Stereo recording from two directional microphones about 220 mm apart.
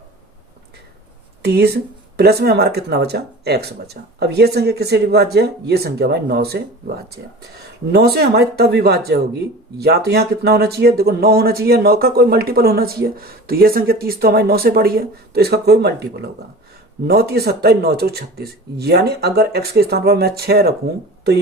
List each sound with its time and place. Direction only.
1.4 s speech: 45° right (ahead or behind)